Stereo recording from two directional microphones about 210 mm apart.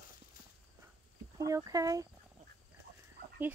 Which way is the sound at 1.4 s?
15° right (ahead or behind).